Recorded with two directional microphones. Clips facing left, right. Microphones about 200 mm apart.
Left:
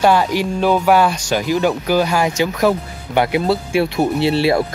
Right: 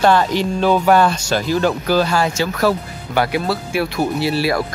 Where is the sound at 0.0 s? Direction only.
10° left (ahead or behind).